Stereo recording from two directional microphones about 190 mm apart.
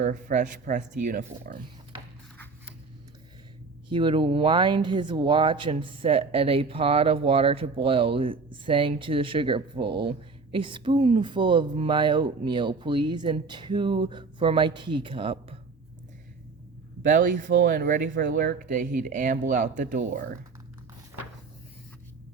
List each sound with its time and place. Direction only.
0.0 s speech: 40° right (ahead or behind)
3.8 s speech: 25° right (ahead or behind)
17.1 s speech: 45° right (ahead or behind)